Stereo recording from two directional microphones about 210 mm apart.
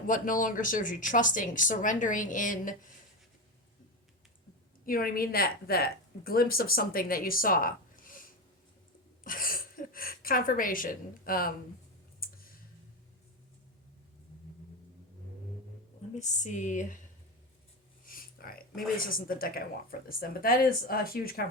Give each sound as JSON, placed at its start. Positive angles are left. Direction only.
{"t": 0.1, "sound": "speech", "side_deg": 40}
{"t": 4.9, "sound": "a woman's voice", "side_deg": 45}
{"t": 12.2, "sound": "a sound", "side_deg": 45}
{"t": 16.1, "sound": "speech", "side_deg": 35}
{"t": 18.0, "sound": "a sound", "side_deg": 45}
{"t": 18.9, "sound": "speech", "side_deg": 40}